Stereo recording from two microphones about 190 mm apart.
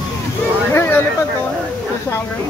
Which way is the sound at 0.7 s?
10° left (ahead or behind).